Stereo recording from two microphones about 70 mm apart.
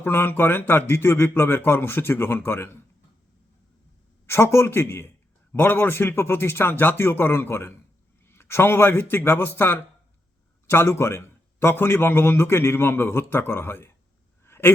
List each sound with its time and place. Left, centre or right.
0.0 s a man's voice: left
4.3 s a man's voice: left
14.4 s a sound: left